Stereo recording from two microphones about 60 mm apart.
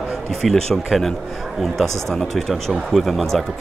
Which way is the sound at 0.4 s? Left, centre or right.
Centre.